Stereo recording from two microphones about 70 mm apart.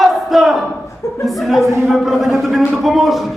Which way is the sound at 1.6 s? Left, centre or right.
Right.